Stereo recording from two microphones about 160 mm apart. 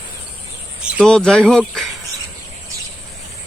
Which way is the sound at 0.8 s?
5° right (ahead or behind).